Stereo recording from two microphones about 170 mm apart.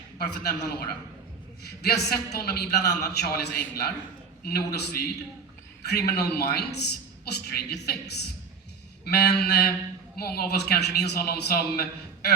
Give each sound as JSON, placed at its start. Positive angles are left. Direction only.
{"t": 0.2, "sound": "a man's voice", "side_deg": 65}